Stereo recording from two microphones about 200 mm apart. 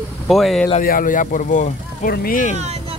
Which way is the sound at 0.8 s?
45° left (ahead or behind).